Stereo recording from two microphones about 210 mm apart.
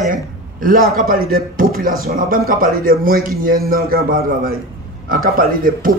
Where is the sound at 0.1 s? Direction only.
40° right (ahead or behind).